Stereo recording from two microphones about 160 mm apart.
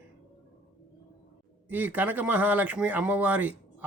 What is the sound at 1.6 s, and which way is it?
Speech, 10° right (ahead or behind).